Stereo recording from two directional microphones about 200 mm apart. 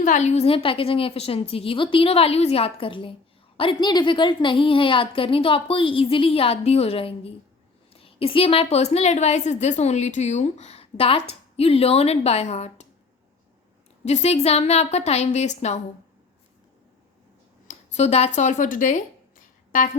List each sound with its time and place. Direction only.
0.0 s a woman's voice: 35° left (ahead or behind)
14.0 s a woman's voice: 35° left (ahead or behind)
17.7 s speech: 35° left (ahead or behind)